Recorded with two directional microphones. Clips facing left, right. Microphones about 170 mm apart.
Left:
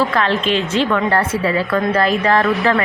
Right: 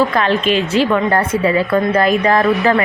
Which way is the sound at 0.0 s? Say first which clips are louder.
Right 2 dB; 15° right (ahead or behind).